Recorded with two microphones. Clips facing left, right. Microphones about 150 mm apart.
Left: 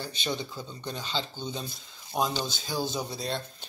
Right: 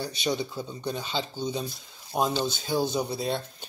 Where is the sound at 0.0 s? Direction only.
10° right (ahead or behind).